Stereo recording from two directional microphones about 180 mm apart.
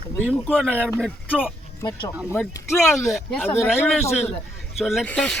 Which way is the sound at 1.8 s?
20° left (ahead or behind).